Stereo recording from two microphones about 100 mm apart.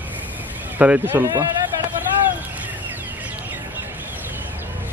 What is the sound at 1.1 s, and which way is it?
Speech, 35° right (ahead or behind).